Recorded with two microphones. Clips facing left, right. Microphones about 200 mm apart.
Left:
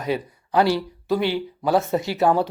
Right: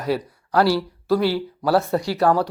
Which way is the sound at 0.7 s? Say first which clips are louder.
Right 2 dB; 20° left (ahead or behind).